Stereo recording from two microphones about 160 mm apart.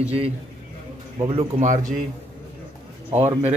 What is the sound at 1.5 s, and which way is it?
Speech, 50° right (ahead or behind).